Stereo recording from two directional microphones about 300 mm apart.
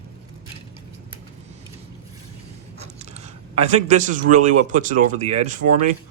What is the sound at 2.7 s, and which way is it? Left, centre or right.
Speech, right.